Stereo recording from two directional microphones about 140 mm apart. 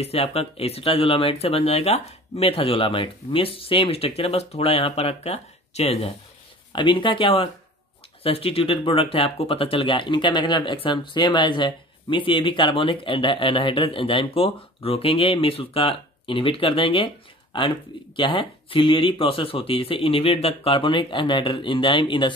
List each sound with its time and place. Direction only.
0.0 s speech: 45° left (ahead or behind)
6.7 s speech: 35° left (ahead or behind)